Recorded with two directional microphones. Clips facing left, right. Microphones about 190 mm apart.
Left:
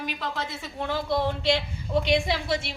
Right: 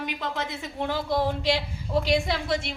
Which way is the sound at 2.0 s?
Centre (ahead or behind).